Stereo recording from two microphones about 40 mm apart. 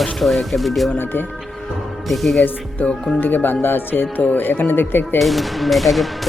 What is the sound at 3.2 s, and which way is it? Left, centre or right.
Speech, left.